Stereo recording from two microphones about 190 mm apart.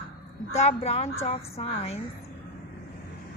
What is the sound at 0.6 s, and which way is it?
A woman's voice, 35° left (ahead or behind).